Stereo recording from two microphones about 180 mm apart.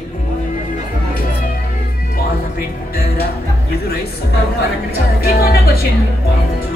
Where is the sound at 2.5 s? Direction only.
55° left (ahead or behind).